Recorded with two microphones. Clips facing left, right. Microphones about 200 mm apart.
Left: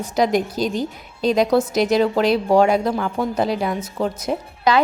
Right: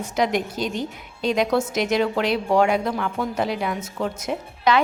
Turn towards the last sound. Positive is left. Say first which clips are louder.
# left 2 dB
turn(degrees=35)  # may be behind; listen again after turning